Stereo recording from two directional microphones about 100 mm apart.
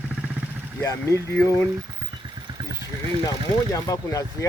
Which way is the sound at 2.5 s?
40° right (ahead or behind).